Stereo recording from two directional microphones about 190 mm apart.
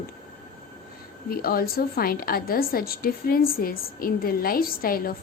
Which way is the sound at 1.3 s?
50° left (ahead or behind).